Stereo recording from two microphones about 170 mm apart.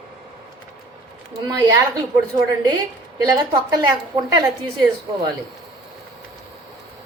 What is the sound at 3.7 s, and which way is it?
Speech, 20° right (ahead or behind).